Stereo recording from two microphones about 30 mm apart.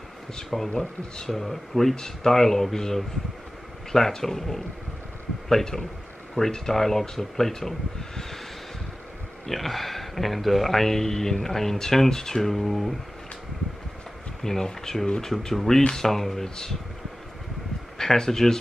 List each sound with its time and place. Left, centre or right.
0.5 s speech: centre
9.5 s speech: centre
14.4 s speech: centre
16.4 s speech: left
17.9 s speech: left